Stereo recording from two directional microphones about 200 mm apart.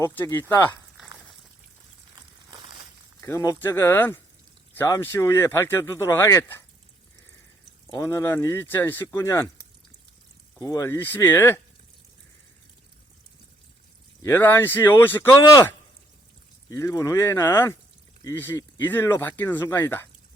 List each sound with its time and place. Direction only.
0.0 s speech: 15° left (ahead or behind)
2.5 s a sound: 20° right (ahead or behind)
3.2 s speech: 15° left (ahead or behind)
7.9 s speech: 15° left (ahead or behind)
10.6 s speech: 15° left (ahead or behind)
14.2 s speech: 10° left (ahead or behind)